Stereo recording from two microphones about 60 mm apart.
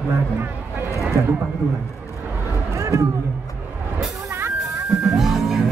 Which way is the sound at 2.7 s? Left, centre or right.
Right.